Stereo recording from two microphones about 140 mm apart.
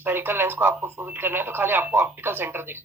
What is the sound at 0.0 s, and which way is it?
Speech, 15° right (ahead or behind).